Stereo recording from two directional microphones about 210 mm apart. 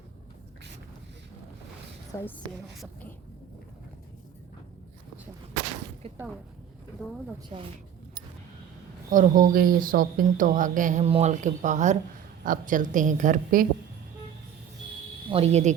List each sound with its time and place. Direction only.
2.1 s a woman's voice: 10° left (ahead or behind)
9.0 s speech: 40° right (ahead or behind)
15.3 s speech: 30° right (ahead or behind)